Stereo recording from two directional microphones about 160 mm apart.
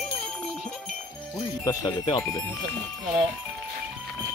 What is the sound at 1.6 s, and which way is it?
Speech, 20° left (ahead or behind).